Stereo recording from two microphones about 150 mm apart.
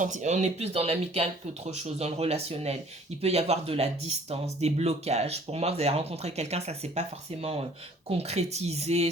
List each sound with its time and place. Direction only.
0.0 s speech: 55° right (ahead or behind)